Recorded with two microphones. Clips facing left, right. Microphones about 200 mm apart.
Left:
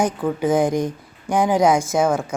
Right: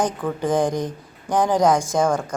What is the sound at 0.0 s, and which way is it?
Speech, 10° left (ahead or behind).